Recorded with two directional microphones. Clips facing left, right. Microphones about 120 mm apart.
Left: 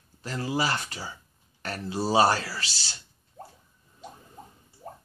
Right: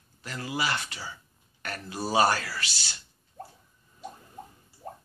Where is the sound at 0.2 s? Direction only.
30° left (ahead or behind).